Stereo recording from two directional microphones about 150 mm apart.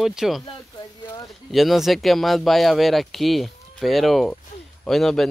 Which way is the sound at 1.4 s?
Centre (ahead or behind).